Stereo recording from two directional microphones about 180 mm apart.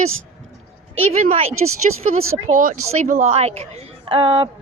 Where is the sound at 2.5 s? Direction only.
50° right (ahead or behind).